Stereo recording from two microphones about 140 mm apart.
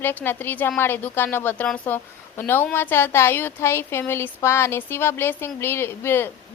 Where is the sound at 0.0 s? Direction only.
15° left (ahead or behind).